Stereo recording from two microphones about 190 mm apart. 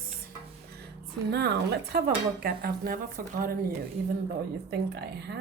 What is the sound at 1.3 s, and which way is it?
Speech, 60° right (ahead or behind).